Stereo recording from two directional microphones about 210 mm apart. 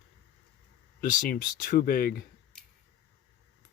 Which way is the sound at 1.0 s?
40° left (ahead or behind).